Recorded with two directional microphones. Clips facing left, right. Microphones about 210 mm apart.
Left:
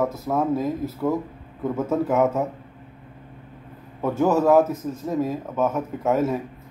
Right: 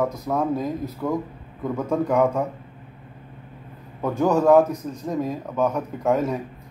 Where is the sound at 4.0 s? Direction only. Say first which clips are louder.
Even; 5° left (ahead or behind).